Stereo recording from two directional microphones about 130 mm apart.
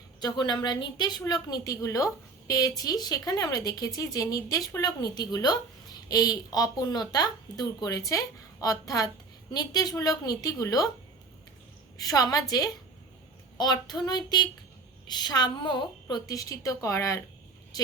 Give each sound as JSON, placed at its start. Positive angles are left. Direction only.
{"t": 0.2, "sound": "a woman's voice", "side_deg": 30}
{"t": 11.9, "sound": "a woman's voice", "side_deg": 30}